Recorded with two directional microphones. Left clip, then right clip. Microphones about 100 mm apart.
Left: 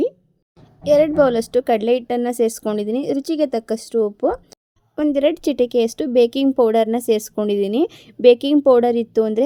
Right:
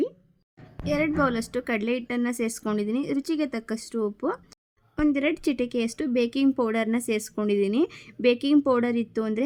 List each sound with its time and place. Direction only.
0.9 s a woman's voice: 40° left (ahead or behind)
5.1 s speech: 45° left (ahead or behind)